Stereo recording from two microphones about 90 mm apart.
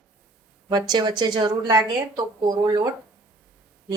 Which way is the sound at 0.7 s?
50° right (ahead or behind).